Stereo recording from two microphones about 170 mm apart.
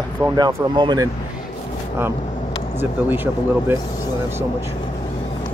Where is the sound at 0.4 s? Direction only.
25° right (ahead or behind).